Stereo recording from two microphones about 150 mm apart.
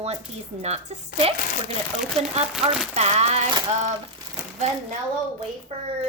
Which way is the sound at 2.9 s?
45° right (ahead or behind).